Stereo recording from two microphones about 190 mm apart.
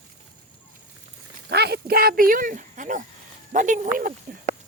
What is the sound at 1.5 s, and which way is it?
Speech, 60° right (ahead or behind).